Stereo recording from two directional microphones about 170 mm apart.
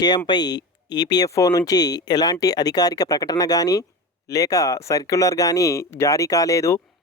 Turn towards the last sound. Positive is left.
turn(degrees=20)  # may be behind; listen again after turning